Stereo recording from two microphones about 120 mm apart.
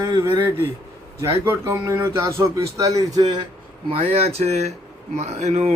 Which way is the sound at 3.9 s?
55° right (ahead or behind).